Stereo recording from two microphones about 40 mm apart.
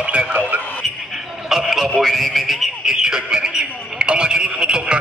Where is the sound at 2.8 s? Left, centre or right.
Centre.